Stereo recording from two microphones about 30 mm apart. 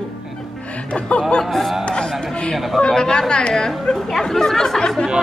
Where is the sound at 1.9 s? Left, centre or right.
Left.